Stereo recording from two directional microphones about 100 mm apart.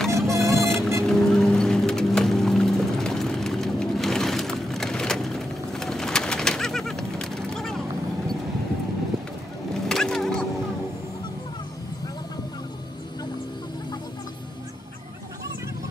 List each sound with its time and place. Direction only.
0.1 s music: 30° right (ahead or behind)
1.0 s music: 5° left (ahead or behind)
9.8 s splinter: 5° left (ahead or behind)